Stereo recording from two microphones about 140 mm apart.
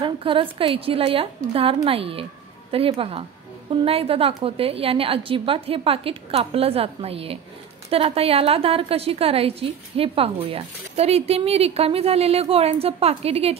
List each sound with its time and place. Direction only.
0.0 s a woman's voice: 40° right (ahead or behind)